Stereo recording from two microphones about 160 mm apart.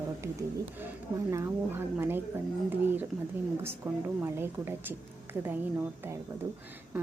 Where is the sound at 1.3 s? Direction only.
15° right (ahead or behind).